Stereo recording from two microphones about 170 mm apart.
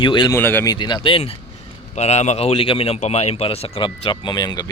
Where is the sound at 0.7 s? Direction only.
25° left (ahead or behind).